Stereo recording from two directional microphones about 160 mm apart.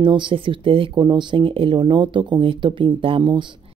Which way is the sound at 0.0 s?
30° right (ahead or behind).